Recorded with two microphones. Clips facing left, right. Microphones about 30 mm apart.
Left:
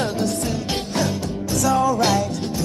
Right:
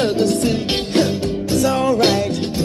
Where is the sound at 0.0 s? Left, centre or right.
Right.